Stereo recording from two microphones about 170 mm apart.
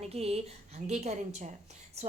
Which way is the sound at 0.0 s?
35° right (ahead or behind).